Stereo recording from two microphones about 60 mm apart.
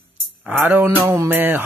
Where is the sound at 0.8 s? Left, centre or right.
Right.